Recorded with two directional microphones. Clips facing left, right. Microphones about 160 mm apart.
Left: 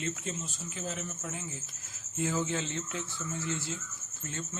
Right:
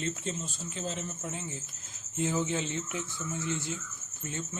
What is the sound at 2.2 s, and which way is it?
Speech, 20° right (ahead or behind).